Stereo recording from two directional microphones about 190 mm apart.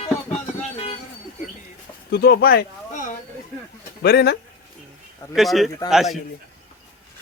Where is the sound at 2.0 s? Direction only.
55° left (ahead or behind).